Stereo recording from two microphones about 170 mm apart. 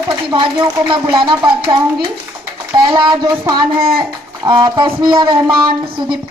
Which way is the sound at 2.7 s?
25° right (ahead or behind).